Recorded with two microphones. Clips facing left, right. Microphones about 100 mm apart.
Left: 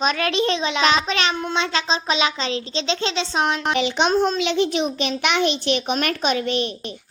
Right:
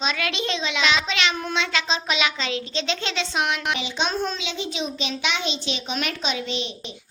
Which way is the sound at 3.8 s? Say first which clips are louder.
Left 7 dB; 60° left (ahead or behind).